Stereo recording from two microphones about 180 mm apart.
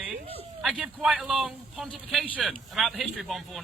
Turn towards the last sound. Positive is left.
turn(degrees=0)  # may be behind; listen again after turning